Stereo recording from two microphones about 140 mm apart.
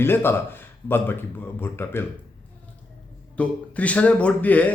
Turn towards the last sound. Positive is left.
turn(degrees=10)  # may be behind; listen again after turning